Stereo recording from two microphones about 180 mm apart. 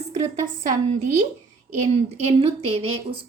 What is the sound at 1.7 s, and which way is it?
A woman's voice, 40° right (ahead or behind).